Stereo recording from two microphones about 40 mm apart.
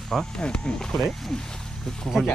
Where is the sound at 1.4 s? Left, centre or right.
Centre.